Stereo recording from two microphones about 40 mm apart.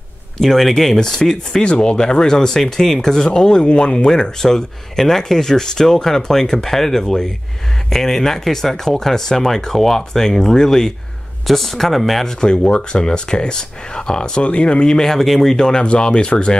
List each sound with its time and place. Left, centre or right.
0.4 s speech: centre
1.6 s speech: left
11.4 s speech: centre
12.3 s speech: left
15.8 s speech: left